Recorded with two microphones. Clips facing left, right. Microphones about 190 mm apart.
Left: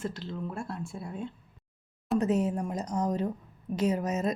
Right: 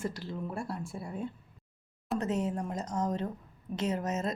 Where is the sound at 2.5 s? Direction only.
20° left (ahead or behind).